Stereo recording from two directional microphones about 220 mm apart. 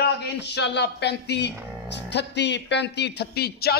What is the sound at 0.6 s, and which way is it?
A man's voice, 50° left (ahead or behind).